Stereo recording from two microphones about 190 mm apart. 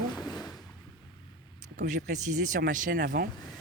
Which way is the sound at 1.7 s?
45° right (ahead or behind).